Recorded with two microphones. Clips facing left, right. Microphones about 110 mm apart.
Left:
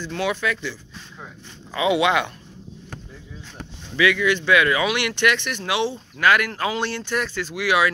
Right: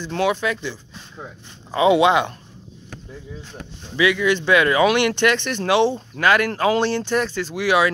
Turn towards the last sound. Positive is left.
turn(degrees=-30)  # may be behind; listen again after turning